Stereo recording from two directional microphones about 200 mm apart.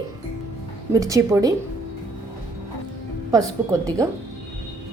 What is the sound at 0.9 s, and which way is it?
Speech, 15° right (ahead or behind).